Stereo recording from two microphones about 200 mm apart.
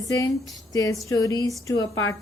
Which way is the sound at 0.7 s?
15° left (ahead or behind).